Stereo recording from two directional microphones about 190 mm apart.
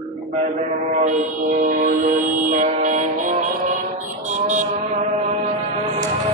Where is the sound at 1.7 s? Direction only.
45° right (ahead or behind).